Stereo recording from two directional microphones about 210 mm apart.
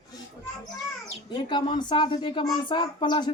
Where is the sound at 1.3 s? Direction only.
20° left (ahead or behind).